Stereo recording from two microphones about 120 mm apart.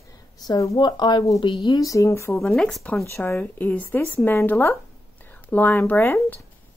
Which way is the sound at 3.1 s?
15° left (ahead or behind).